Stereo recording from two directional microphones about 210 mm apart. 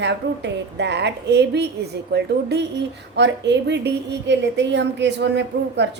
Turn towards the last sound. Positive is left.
turn(degrees=-55)  # may be behind; listen again after turning